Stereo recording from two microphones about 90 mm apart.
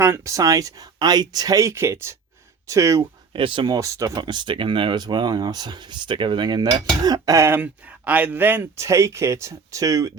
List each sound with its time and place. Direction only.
0.0 s speech: 35° right (ahead or behind)
3.3 s speech: 70° right (ahead or behind)
3.7 s speech: 35° right (ahead or behind)
7.3 s speech: 30° right (ahead or behind)
7.6 s speech: 15° right (ahead or behind); by 10.1 s 40° right (ahead or behind)